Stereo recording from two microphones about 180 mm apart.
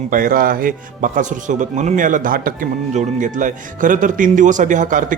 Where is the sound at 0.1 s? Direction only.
50° right (ahead or behind).